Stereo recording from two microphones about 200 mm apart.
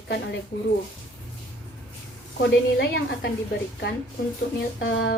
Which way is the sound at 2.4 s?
60° left (ahead or behind).